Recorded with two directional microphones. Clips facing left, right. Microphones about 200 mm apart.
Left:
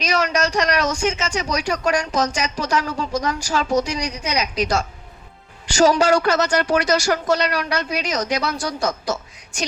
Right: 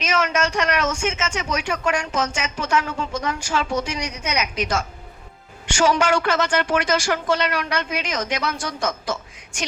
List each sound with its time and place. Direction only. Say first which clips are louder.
0.0 s speech: left 1 dB; 35° left (ahead or behind)